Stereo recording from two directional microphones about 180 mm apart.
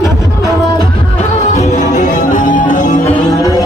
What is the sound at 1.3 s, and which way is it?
Music, 40° left (ahead or behind).